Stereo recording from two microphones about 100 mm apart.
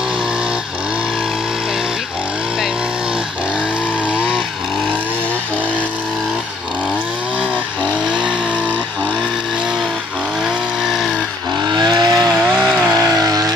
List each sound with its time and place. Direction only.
11.7 s vehicle: 45° right (ahead or behind)
12.4 s chainsaw: centre (ahead or behind)
13.2 s vehicle: 35° right (ahead or behind)